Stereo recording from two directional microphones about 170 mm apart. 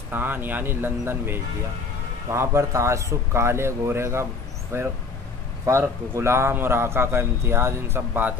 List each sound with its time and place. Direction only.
0.1 s a man's voice: 10° right (ahead or behind)